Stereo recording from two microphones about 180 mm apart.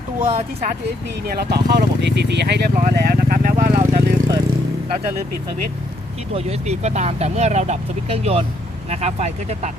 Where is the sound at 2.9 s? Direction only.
60° right (ahead or behind).